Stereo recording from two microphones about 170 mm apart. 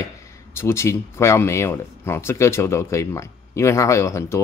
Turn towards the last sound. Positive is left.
turn(degrees=15)  # may be behind; listen again after turning